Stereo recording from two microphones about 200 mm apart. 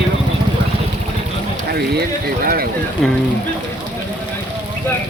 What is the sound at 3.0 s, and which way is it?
Speech, centre (ahead or behind).